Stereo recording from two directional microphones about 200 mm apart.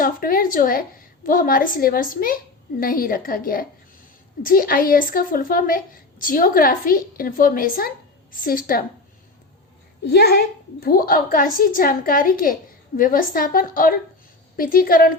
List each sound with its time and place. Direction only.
0.0 s a woman's voice: 45° left (ahead or behind)
10.1 s a woman's voice: 50° left (ahead or behind)